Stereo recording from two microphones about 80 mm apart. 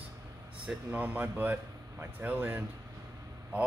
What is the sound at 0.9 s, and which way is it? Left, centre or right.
Speech, right.